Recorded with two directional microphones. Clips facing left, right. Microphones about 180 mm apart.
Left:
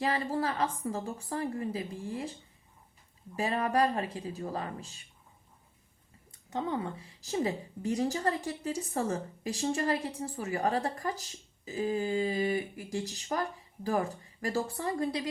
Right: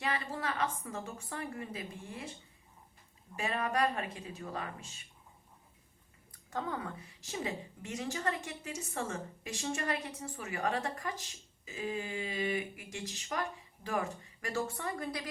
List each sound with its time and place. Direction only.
0.0 s a woman's voice: 35° left (ahead or behind)
3.3 s a woman's voice: 35° left (ahead or behind)
6.3 s a woman's voice: 20° left (ahead or behind)